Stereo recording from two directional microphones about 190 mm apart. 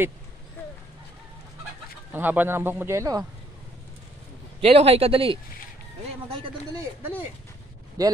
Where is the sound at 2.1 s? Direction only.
10° right (ahead or behind).